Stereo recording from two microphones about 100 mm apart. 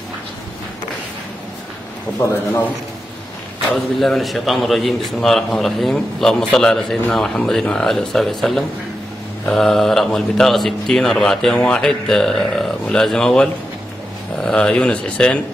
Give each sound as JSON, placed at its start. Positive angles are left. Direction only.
{"t": 2.1, "sound": "a man's voice", "side_deg": 30}
{"t": 3.7, "sound": "speech", "side_deg": 0}